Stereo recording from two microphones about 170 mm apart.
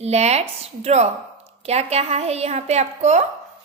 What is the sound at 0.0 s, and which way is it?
A woman's voice, 40° right (ahead or behind).